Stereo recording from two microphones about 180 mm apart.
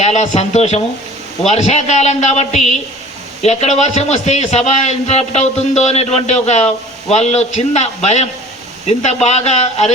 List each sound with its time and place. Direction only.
0.0 s a man's voice: 35° left (ahead or behind)